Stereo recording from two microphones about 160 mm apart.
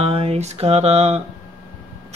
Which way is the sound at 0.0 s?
40° right (ahead or behind).